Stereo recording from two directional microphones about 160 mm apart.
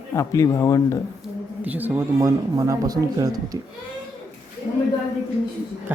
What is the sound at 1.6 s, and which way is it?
Speech, 10° right (ahead or behind).